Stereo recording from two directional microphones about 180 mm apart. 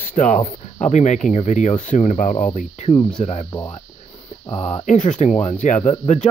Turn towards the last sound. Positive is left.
turn(degrees=40)  # may be behind; listen again after turning